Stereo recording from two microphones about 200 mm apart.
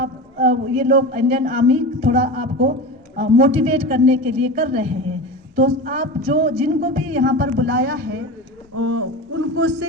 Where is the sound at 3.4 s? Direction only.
30° right (ahead or behind).